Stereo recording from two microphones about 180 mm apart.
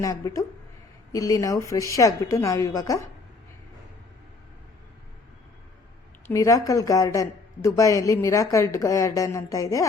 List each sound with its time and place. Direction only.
0.0 s speech: 20° left (ahead or behind)
6.2 s speech: 15° left (ahead or behind)